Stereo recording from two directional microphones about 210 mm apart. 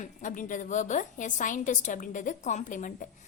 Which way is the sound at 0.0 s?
35° left (ahead or behind).